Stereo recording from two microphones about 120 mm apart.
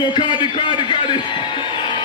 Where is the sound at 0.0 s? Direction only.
40° left (ahead or behind).